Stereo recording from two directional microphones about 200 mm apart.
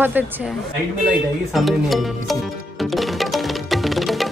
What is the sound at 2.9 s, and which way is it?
Music, centre (ahead or behind).